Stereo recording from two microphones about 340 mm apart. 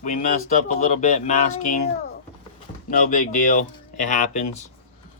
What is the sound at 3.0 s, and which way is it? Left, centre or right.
Speech, left.